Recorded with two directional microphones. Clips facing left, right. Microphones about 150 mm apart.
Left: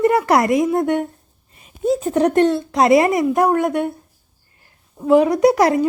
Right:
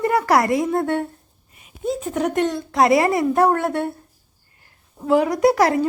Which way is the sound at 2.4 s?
25° left (ahead or behind).